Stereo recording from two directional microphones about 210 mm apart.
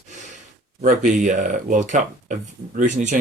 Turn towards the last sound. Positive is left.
turn(degrees=-35)  # may be behind; listen again after turning